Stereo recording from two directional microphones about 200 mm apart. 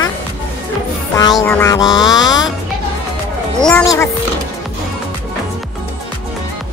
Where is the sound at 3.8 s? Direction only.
15° left (ahead or behind).